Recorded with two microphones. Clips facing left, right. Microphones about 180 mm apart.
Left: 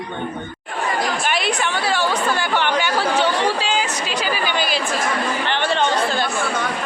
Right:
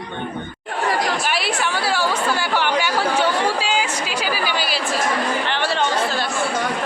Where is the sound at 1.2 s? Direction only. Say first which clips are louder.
Left 1 dB; 5° right (ahead or behind).